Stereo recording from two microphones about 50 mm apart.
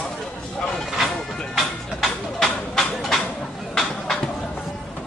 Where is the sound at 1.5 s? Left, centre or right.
Centre.